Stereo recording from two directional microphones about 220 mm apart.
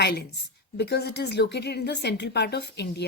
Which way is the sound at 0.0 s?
45° left (ahead or behind).